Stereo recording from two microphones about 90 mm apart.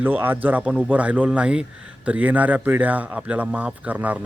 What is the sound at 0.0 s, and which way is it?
Speech, 20° right (ahead or behind).